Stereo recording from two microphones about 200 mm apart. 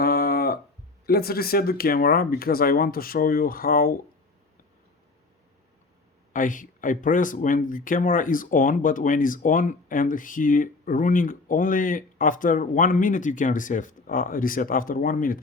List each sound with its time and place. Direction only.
0.0 s a sound: 50° left (ahead or behind)
1.0 s speech: 50° left (ahead or behind)
6.3 s speech: 40° left (ahead or behind)